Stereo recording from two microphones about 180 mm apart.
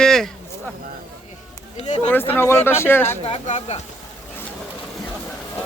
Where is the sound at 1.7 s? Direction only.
40° left (ahead or behind).